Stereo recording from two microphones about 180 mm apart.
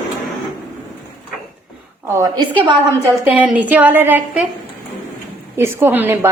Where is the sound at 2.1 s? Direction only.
20° right (ahead or behind).